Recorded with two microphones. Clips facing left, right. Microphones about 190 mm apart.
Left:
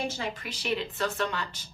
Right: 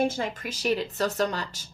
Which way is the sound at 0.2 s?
45° right (ahead or behind).